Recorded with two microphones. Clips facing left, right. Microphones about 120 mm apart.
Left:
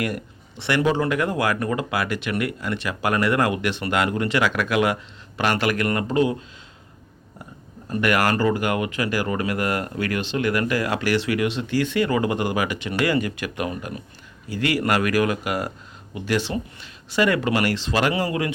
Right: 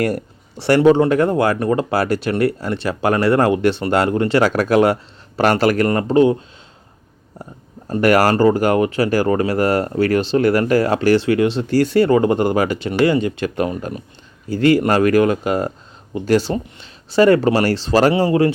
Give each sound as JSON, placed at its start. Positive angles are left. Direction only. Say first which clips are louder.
{"t": 0.0, "sound": "speech", "louder": "right 7 dB", "side_deg": -40}
{"t": 7.9, "sound": "speech", "louder": "right 7 dB", "side_deg": -35}